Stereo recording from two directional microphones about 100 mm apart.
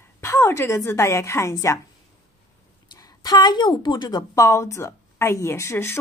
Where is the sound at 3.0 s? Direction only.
45° left (ahead or behind).